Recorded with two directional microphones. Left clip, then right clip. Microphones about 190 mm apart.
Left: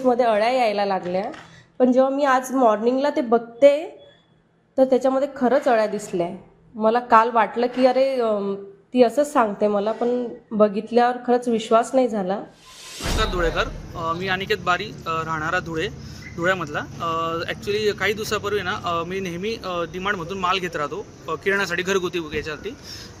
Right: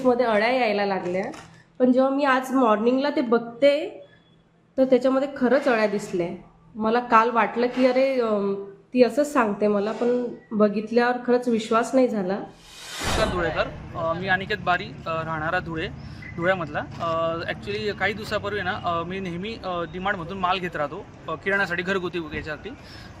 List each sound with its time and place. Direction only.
0.0 s a woman's voice: 15° left (ahead or behind)
13.3 s speech: 5° left (ahead or behind)